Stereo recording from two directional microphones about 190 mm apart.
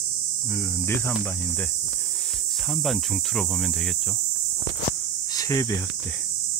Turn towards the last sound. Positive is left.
turn(degrees=15)  # may be behind; listen again after turning